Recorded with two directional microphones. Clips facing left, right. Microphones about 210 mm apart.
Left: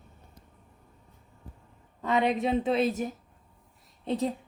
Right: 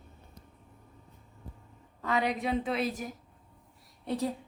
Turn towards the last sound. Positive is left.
turn(degrees=20)  # may be behind; listen again after turning